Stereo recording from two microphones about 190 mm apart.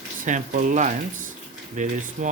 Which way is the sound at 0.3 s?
40° right (ahead or behind).